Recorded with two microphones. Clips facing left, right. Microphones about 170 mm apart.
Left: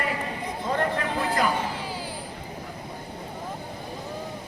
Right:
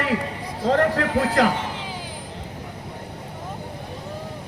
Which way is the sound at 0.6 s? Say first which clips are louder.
Right 7 dB; 80° right.